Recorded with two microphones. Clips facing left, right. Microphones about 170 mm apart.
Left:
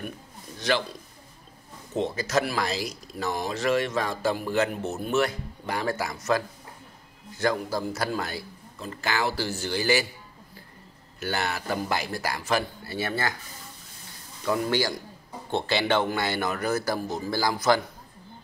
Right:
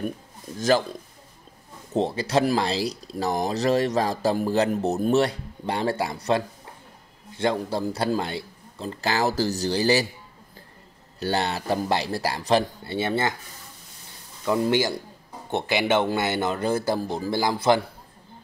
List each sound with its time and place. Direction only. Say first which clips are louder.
0.6 s a man's voice: right 5 dB; 45° right (ahead or behind)
2.0 s speech: right 3 dB; 30° right (ahead or behind)
11.1 s a man's voice: right 4 dB; 30° right (ahead or behind)
14.4 s a man's voice: right 3 dB; 20° right (ahead or behind)